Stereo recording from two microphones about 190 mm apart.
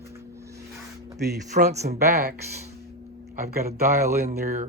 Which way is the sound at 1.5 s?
35° right (ahead or behind).